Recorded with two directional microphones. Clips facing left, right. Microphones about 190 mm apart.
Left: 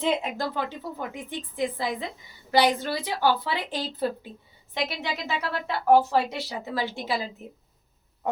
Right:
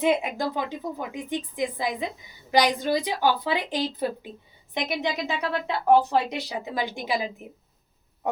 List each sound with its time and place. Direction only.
0.0 s a woman's voice: 10° right (ahead or behind)